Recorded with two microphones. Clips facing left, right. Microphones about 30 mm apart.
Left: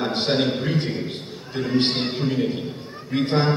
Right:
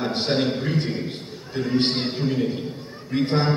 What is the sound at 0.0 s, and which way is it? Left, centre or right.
A man's voice, centre.